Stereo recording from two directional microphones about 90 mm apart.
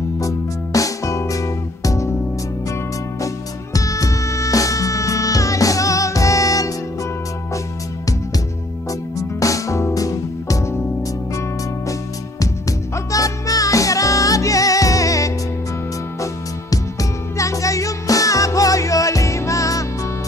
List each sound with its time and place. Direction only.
0.7 s music: 35° left (ahead or behind)
3.7 s music: 40° left (ahead or behind)
9.4 s music: 35° left (ahead or behind)
12.9 s music: 40° left (ahead or behind)
17.4 s music: 35° left (ahead or behind)